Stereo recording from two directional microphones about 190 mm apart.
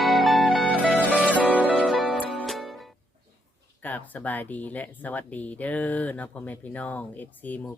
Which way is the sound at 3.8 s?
10° left (ahead or behind).